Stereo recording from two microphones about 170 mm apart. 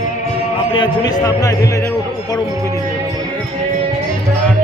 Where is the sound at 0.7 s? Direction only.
25° left (ahead or behind).